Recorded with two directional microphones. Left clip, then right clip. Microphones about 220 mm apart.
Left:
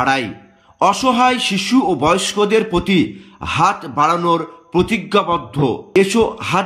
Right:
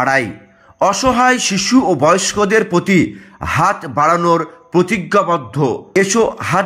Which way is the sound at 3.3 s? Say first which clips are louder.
Right 1 dB; 15° right (ahead or behind).